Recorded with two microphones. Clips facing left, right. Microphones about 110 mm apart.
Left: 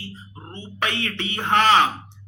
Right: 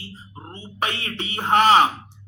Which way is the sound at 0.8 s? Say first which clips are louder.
Left 1 dB; 35° right (ahead or behind).